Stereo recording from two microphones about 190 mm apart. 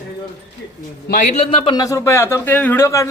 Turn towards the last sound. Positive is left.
turn(degrees=15)  # may be behind; listen again after turning